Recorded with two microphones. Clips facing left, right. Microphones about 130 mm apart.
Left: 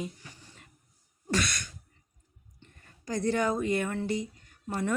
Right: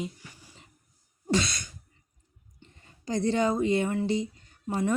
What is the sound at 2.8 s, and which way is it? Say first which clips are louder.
Speech: right 3 dB; 25° right (ahead or behind).